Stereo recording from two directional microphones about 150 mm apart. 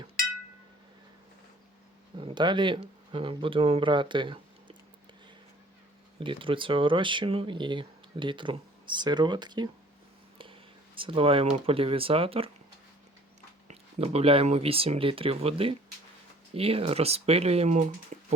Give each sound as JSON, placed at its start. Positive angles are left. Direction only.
{"t": 2.1, "sound": "speech", "side_deg": -30}
{"t": 6.1, "sound": "speech", "side_deg": -35}
{"t": 13.7, "sound": "speech", "side_deg": -45}